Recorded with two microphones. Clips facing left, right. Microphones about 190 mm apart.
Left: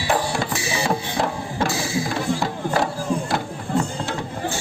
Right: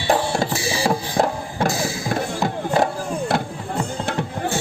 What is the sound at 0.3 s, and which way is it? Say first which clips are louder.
Music: right 2 dB; 35° right (ahead or behind).